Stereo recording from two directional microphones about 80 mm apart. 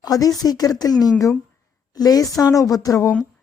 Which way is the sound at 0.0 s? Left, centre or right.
Left.